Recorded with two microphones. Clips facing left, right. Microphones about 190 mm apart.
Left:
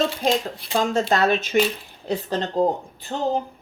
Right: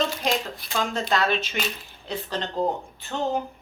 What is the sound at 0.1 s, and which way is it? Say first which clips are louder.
Speech: left 4 dB; 30° left (ahead or behind).